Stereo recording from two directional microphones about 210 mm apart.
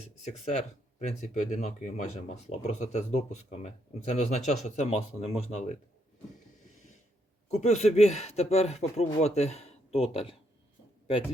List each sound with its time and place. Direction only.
0.2 s speech: 35° left (ahead or behind)
7.5 s speech: 30° left (ahead or behind)